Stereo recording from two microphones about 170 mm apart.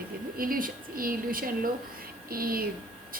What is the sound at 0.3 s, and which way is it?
A woman's voice, 55° right (ahead or behind).